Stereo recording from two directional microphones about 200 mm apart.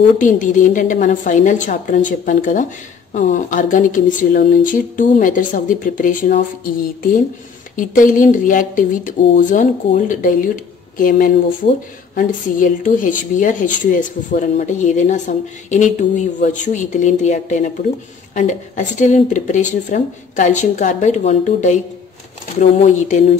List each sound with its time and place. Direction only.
0.2 s speech: 40° left (ahead or behind)